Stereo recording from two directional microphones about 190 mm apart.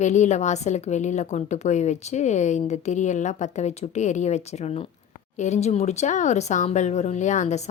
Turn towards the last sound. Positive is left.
turn(degrees=40)  # may be behind; listen again after turning